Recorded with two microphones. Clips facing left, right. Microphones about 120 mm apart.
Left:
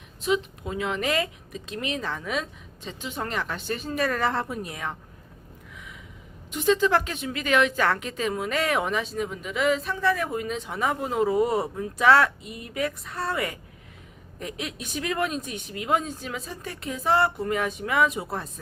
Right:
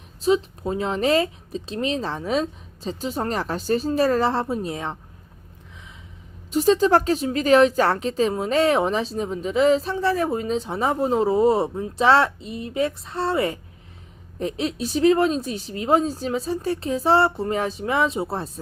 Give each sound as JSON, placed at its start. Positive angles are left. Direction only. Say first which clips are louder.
{"t": 0.2, "sound": "a woman's voice", "louder": "right 5 dB", "side_deg": -35}
{"t": 6.5, "sound": "a woman's voice", "louder": "right 5 dB", "side_deg": -35}